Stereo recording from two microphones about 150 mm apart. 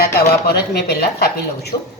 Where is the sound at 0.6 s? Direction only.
90° left.